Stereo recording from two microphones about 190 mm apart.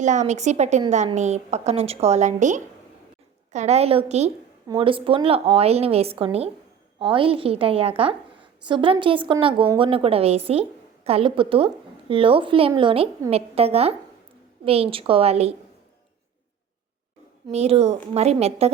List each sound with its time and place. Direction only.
0.0 s a woman's voice: 40° right (ahead or behind)
17.5 s a woman's voice: 35° right (ahead or behind)